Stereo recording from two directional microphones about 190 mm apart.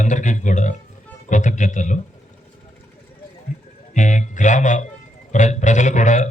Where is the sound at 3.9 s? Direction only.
40° left (ahead or behind).